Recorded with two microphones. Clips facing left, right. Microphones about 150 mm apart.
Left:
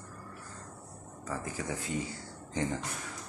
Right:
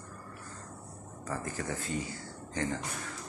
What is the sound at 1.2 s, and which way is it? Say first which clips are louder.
Speech: even; 10° left (ahead or behind).